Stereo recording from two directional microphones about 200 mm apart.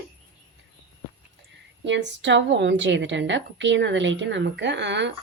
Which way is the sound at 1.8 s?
60° right (ahead or behind).